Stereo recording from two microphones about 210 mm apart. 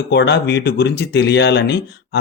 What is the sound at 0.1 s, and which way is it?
Speech, 55° left (ahead or behind).